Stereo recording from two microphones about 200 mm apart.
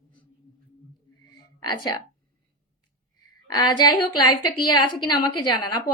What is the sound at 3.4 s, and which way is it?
A woman's voice, 20° left (ahead or behind).